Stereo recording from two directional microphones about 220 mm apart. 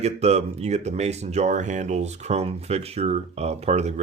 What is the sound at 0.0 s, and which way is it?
Speech, 30° right (ahead or behind).